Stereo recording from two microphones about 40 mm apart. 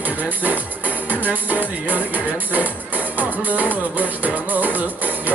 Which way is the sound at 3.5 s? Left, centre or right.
Right.